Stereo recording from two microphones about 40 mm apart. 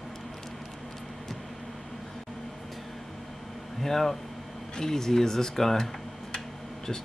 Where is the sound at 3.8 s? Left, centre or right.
Centre.